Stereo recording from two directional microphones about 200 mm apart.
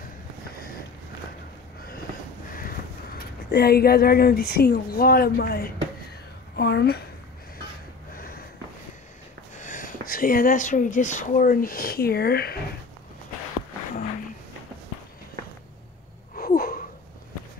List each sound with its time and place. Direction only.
3.5 s a woman's voice: 50° left (ahead or behind)
8.1 s sniff: 45° left (ahead or behind)
9.6 s speech: 40° left (ahead or behind)
16.3 s a sound: 45° left (ahead or behind)